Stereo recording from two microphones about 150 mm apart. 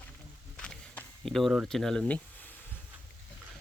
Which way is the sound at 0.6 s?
5° left (ahead or behind).